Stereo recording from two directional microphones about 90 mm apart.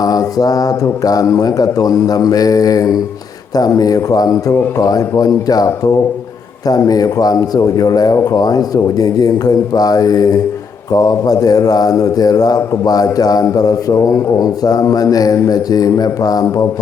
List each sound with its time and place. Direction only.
0.0 s a man's voice: 45° left (ahead or behind)